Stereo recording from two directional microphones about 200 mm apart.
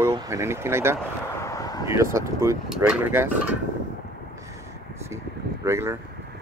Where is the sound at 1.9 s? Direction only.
15° right (ahead or behind).